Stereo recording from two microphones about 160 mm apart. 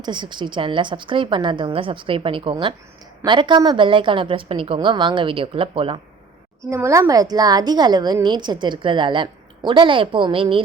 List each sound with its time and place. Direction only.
0.0 s a woman's voice: 30° right (ahead or behind)
6.6 s speech: 20° right (ahead or behind); by 10.6 s 35° right (ahead or behind)